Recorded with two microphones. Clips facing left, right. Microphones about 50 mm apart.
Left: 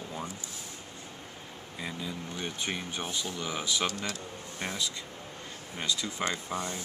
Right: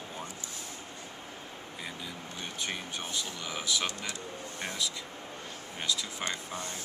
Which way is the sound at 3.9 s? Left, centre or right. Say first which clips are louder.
Left 3 dB; centre.